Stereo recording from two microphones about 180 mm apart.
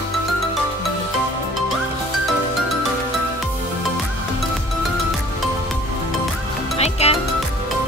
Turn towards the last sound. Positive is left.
turn(degrees=35)  # may be behind; listen again after turning